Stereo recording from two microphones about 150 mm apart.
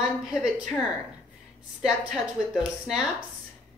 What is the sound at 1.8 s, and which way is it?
A woman's voice, 5° right (ahead or behind).